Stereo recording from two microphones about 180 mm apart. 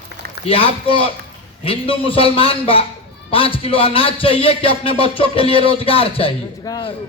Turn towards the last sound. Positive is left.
turn(degrees=20)  # may be behind; listen again after turning